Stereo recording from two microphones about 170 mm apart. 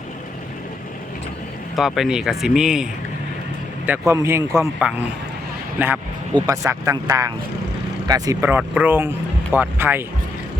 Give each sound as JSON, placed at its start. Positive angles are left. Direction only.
{"t": 1.7, "sound": "speech", "side_deg": 0}
{"t": 3.8, "sound": "a man's voice", "side_deg": -15}